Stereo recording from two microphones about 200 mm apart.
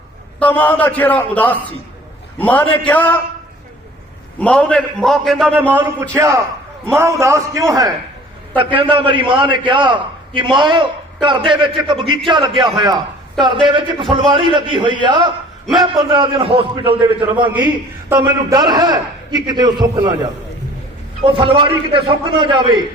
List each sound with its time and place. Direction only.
0.3 s a man's voice: 5° left (ahead or behind)
4.4 s a man's voice: 5° left (ahead or behind)
5.7 s a man's voice: 10° right (ahead or behind)
17.5 s a man's voice: 10° right (ahead or behind)
18.3 s a man's voice: 20° right (ahead or behind)
21.2 s a man's voice: 25° right (ahead or behind)